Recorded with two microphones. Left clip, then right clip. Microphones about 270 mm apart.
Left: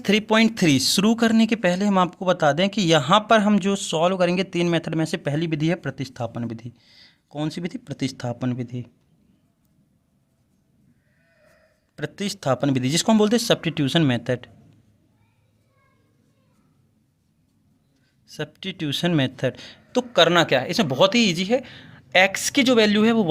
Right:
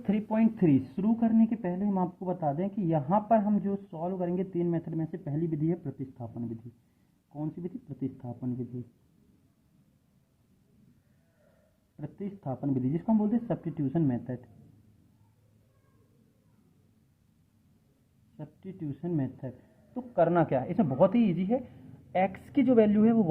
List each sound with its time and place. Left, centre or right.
0.0 s speech: left
11.9 s speech: left
18.3 s speech: left
20.1 s speech: left